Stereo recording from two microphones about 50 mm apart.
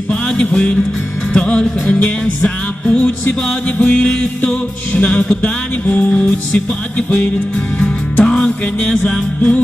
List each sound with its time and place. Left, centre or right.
0.1 s music: left